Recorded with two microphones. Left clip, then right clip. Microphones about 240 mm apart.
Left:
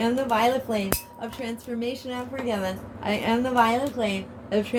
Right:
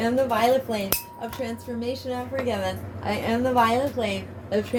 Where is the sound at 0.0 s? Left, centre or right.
Left.